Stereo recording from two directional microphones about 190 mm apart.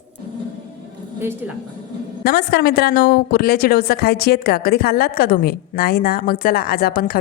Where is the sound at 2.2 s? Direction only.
55° left (ahead or behind).